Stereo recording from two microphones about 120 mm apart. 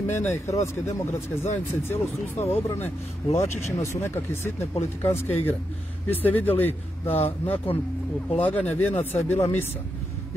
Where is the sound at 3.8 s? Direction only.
20° left (ahead or behind).